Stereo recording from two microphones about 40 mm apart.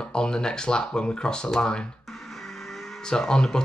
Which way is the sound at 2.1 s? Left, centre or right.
Centre.